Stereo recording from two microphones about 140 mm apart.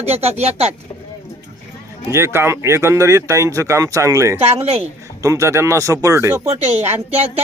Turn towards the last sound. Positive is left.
turn(degrees=-50)  # may be behind; listen again after turning